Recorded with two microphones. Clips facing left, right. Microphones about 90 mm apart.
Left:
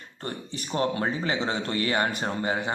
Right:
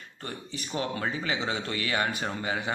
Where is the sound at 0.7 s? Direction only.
35° left (ahead or behind).